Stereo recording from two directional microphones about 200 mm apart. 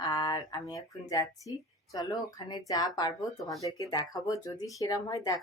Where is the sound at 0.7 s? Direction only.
15° left (ahead or behind).